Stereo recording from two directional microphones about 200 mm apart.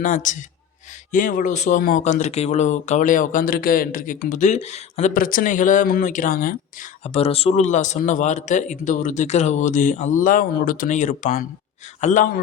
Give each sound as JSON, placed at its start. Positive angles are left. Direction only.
{"t": 0.0, "sound": "speech", "side_deg": 40}
{"t": 7.0, "sound": "a man's voice", "side_deg": 30}